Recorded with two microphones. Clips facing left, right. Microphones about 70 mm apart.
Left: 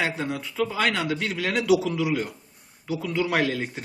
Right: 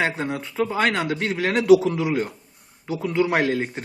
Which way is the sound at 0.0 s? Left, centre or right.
Right.